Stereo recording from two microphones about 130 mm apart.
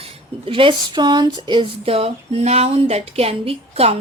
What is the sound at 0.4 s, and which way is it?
A woman's voice, 45° right (ahead or behind).